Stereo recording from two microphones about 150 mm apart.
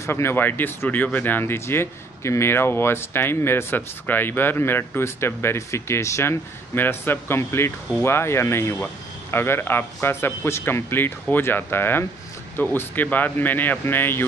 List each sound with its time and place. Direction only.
0.0 s speech: 15° left (ahead or behind)